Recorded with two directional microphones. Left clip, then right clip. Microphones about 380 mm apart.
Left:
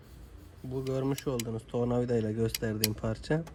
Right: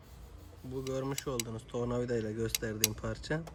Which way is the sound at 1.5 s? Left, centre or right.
Left.